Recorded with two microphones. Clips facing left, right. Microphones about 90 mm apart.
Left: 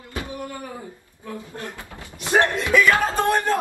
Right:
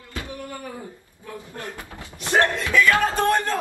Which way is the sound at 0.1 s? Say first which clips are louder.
Left 2 dB; 20° left (ahead or behind).